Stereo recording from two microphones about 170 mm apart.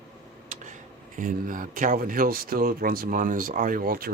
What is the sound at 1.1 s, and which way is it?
Speech, 50° right (ahead or behind).